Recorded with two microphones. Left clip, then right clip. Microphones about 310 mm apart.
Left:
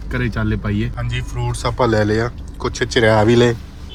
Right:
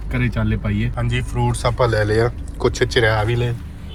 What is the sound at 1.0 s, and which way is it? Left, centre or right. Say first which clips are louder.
Speech: right 4 dB; centre.